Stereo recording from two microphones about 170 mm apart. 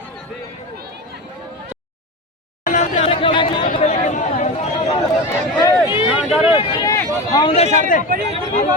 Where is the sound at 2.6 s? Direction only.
45° left (ahead or behind).